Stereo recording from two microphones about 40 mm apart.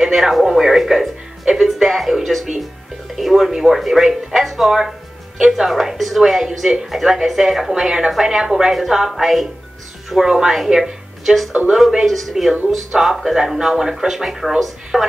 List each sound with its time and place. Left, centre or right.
0.0 s speech: centre
5.7 s speech: centre
7.7 s speech: centre
11.7 s speech: centre
12.1 s speech: centre